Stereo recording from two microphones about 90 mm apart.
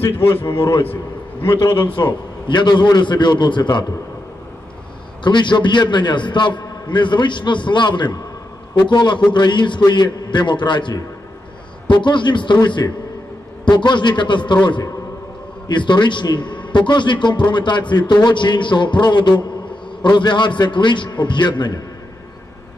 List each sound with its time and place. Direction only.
1.4 s a man's voice: 60° left (ahead or behind)
5.2 s a man's voice: 60° left (ahead or behind)
15.7 s a man's voice: 60° left (ahead or behind)